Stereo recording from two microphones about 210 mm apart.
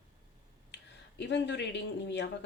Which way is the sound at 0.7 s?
55° left (ahead or behind).